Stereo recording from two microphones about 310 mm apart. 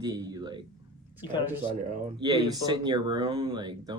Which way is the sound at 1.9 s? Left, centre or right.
Centre.